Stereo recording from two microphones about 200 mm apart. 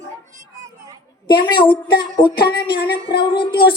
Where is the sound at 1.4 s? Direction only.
25° left (ahead or behind).